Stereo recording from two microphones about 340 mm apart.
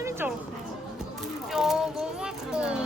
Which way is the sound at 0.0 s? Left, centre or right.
Centre.